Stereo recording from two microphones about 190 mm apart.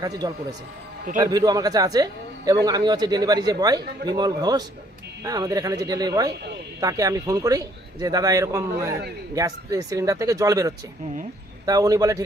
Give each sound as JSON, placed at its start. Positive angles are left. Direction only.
{"t": 0.0, "sound": "a man's voice", "side_deg": -20}